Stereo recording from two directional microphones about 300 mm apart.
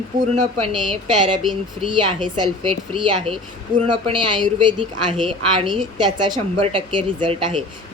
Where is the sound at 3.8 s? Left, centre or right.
Centre.